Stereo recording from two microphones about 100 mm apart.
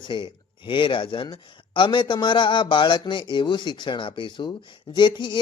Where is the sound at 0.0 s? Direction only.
50° left (ahead or behind).